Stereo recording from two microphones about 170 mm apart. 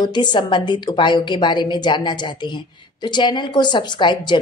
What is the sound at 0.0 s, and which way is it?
A woman's voice, 25° left (ahead or behind).